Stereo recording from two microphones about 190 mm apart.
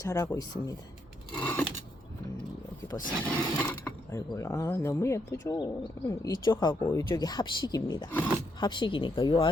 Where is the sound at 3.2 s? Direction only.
10° left (ahead or behind).